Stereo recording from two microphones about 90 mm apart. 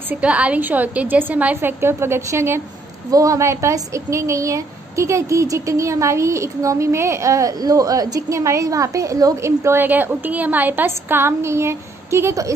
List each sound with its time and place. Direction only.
0.1 s a woman's voice: 15° right (ahead or behind)
3.1 s a woman's voice: 40° right (ahead or behind)